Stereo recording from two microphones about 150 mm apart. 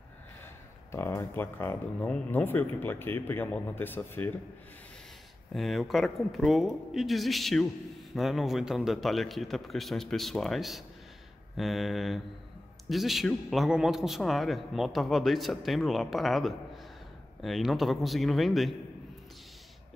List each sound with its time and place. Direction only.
0.9 s speech: 15° left (ahead or behind)
5.5 s a man's voice: centre (ahead or behind)